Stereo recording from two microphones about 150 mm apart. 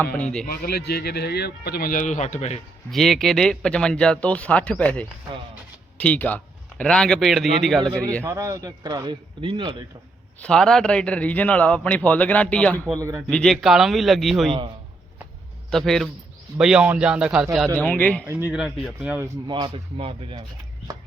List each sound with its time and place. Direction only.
0.2 s a man's voice: 5° left (ahead or behind)
0.4 s speech: 75° left (ahead or behind); by 2.6 s 50° left (ahead or behind)
2.9 s a man's voice: centre (ahead or behind)
8.2 s a man's voice: 20° right (ahead or behind)
10.4 s a man's voice: 5° left (ahead or behind)
12.7 s a man's voice: 20° right (ahead or behind)
13.3 s speech: centre (ahead or behind)
15.7 s speech: 5° left (ahead or behind)
17.8 s a man's voice: 10° left (ahead or behind)
18.5 s speech: centre (ahead or behind)
19.5 s speech: 30° right (ahead or behind)